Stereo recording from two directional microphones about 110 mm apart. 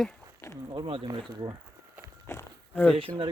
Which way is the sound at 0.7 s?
50° right (ahead or behind).